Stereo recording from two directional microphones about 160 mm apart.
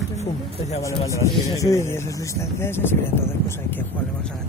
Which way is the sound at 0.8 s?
20° left (ahead or behind).